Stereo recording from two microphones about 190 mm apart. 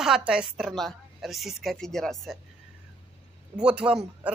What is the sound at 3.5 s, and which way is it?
Speech, 5° right (ahead or behind).